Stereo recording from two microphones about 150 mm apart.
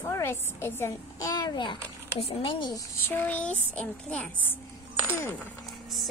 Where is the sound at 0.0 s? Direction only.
20° left (ahead or behind); by 2.7 s 35° left (ahead or behind).